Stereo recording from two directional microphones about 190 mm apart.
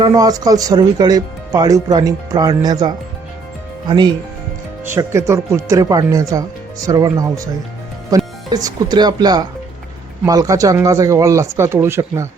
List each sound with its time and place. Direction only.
0.0 s speech: 20° right (ahead or behind)